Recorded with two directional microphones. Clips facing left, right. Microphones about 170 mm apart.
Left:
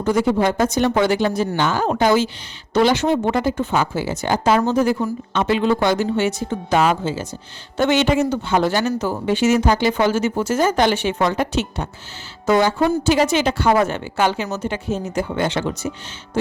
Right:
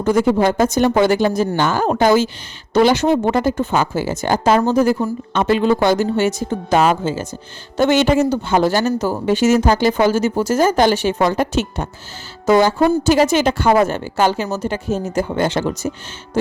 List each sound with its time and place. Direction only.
0.0 s speech: 50° right (ahead or behind)